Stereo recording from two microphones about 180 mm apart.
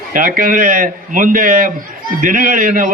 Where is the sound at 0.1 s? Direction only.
50° right (ahead or behind).